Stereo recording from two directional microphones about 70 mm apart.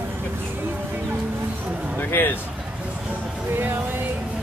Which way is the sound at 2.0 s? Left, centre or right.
Left.